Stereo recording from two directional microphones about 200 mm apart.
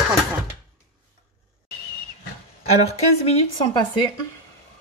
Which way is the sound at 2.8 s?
30° left (ahead or behind).